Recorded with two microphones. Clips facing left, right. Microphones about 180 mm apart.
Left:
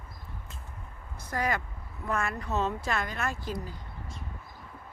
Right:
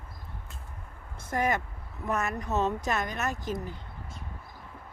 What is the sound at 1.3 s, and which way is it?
Speech, 25° right (ahead or behind).